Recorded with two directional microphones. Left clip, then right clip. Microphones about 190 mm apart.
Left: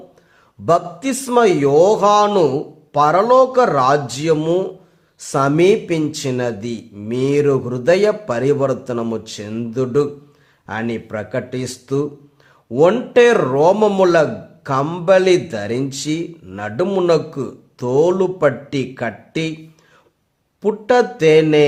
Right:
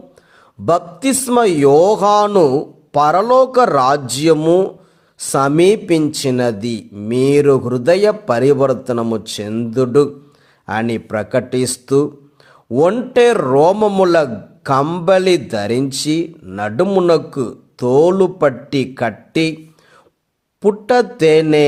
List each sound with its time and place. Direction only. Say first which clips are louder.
0.6 s a man's voice: right 1 dB; 35° right (ahead or behind)
20.6 s a man's voice: right 2 dB; 30° right (ahead or behind)